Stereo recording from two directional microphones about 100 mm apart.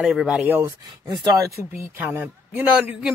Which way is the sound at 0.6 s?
35° right (ahead or behind).